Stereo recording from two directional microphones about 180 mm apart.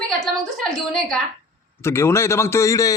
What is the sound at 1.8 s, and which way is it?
A man's voice, 15° left (ahead or behind).